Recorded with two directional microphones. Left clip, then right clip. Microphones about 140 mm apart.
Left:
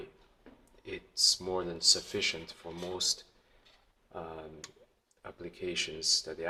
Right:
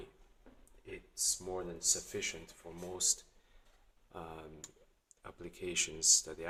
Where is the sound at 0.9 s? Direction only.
20° left (ahead or behind).